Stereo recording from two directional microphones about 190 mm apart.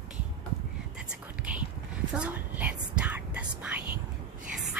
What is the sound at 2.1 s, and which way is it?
Whispering, 5° right (ahead or behind).